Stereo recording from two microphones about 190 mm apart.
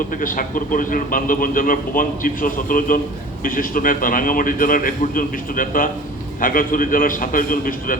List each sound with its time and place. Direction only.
0.1 s a man's voice: 45° left (ahead or behind)